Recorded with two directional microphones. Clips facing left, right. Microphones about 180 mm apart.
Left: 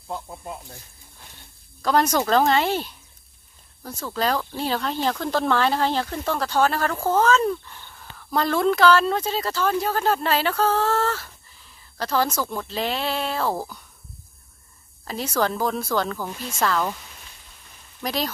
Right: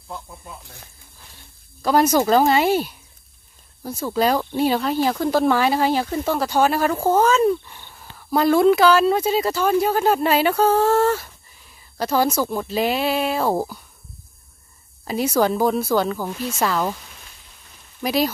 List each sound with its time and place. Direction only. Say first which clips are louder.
1.8 s speech: right 4 dB; 5° right (ahead or behind)
15.0 s speech: right 5 dB; 10° right (ahead or behind)
18.0 s speech: right 6 dB; 10° right (ahead or behind)